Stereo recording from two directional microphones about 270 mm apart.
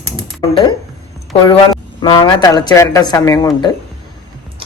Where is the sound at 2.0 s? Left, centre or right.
Centre.